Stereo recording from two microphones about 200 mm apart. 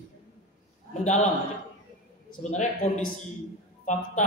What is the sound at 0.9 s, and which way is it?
A man's voice, 35° left (ahead or behind).